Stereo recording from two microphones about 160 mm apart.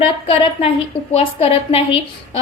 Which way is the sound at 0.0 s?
35° left (ahead or behind).